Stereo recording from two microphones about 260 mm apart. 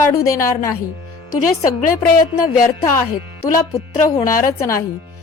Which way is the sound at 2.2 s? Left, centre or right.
Centre.